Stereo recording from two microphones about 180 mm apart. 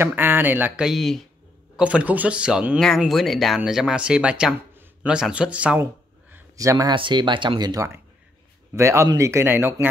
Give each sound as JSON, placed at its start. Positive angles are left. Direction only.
{"t": 0.0, "sound": "speech", "side_deg": -10}
{"t": 6.3, "sound": "speech", "side_deg": -15}